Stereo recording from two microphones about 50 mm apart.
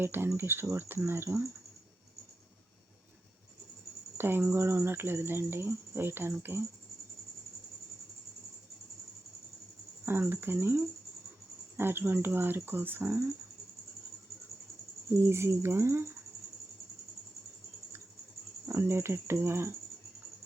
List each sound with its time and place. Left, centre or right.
0.0 s speech: right
4.2 s speech: right
10.1 s speech: right
15.1 s speech: right
18.6 s speech: right